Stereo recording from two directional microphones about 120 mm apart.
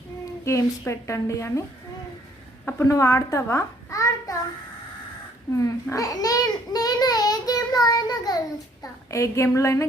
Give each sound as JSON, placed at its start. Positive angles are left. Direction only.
{"t": 0.4, "sound": "a woman's voice", "side_deg": 25}
{"t": 2.6, "sound": "a child's voice", "side_deg": 25}
{"t": 5.6, "sound": "a child's voice", "side_deg": 25}